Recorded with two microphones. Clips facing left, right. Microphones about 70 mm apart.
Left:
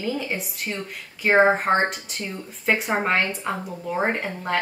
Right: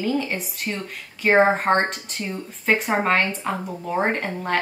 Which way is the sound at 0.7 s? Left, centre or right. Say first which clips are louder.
Right 2 dB; centre.